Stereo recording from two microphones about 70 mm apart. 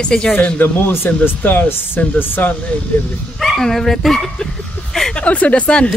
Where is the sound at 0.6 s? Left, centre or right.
Left.